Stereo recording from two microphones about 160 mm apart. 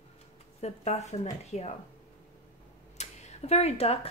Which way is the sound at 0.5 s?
40° left (ahead or behind).